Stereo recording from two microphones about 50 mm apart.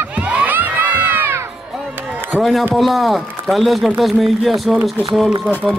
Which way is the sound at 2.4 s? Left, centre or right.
Centre.